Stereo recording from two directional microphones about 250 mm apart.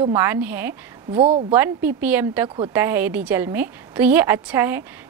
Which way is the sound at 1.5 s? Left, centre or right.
Centre.